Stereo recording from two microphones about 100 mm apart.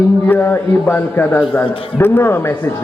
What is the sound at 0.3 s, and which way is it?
A man's voice, 20° left (ahead or behind).